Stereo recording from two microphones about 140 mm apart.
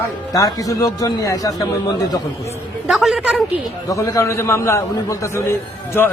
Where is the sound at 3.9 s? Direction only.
25° left (ahead or behind).